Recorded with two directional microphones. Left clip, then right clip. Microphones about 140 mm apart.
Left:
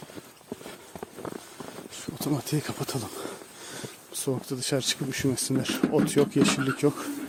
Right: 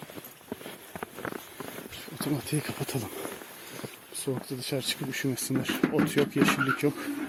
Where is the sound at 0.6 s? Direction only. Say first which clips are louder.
Right 1 dB; 10° left (ahead or behind).